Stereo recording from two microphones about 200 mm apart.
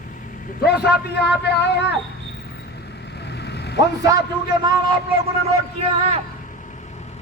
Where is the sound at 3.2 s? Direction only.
55° left (ahead or behind).